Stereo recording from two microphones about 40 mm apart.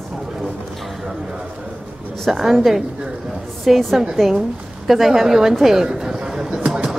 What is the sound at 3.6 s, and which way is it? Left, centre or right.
Speech, centre.